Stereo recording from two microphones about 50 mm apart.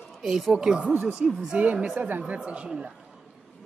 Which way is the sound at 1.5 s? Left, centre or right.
Right.